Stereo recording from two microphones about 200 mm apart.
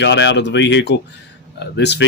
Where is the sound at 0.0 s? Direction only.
60° left (ahead or behind).